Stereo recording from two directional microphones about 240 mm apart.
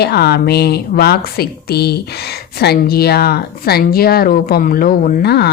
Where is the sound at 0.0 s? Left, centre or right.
Left.